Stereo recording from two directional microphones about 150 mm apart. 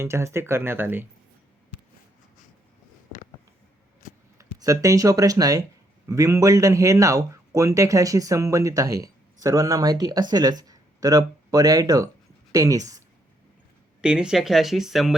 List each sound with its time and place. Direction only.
0.0 s speech: 20° right (ahead or behind)
4.4 s a man's voice: 20° right (ahead or behind)
14.0 s speech: 5° right (ahead or behind)